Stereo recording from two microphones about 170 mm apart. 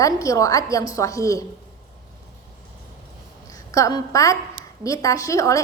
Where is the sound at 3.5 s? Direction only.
20° left (ahead or behind).